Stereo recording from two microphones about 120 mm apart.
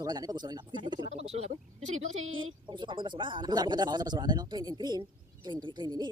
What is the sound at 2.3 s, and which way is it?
Speech, 40° right (ahead or behind).